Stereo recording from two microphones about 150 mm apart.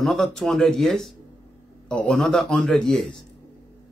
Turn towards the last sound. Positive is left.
turn(degrees=5)  # may be behind; listen again after turning